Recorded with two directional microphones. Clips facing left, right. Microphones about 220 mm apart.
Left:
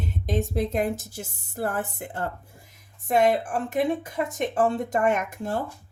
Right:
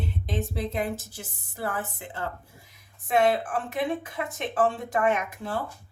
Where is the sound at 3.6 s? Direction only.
45° left (ahead or behind).